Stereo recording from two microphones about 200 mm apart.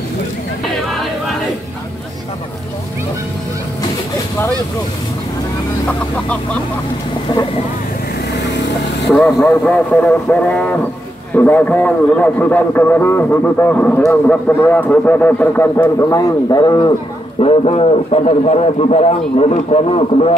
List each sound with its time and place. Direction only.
5.9 s a man's voice: 5° left (ahead or behind)
7.3 s speech: 20° left (ahead or behind)
9.4 s a man's voice: 5° left (ahead or behind); by 20.3 s 30° left (ahead or behind)